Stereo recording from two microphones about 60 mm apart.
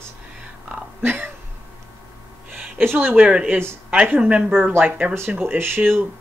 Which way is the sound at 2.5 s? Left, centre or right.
Right.